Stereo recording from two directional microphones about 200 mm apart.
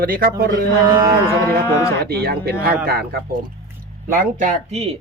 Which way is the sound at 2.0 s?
55° right (ahead or behind).